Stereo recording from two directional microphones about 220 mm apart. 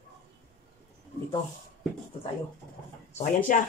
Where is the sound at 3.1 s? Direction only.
35° left (ahead or behind).